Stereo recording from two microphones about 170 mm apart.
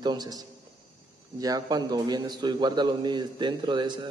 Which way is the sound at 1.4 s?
20° right (ahead or behind).